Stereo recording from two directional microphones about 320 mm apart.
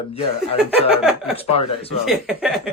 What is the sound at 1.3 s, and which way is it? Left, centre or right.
Speech, centre.